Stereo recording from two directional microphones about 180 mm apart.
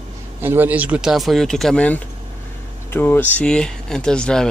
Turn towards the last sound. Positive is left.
turn(degrees=5)  # may be behind; listen again after turning